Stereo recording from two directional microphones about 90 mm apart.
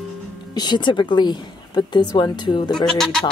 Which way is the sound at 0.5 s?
55° left (ahead or behind).